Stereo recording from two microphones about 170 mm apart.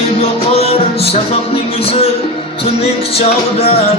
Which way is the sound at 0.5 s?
35° left (ahead or behind).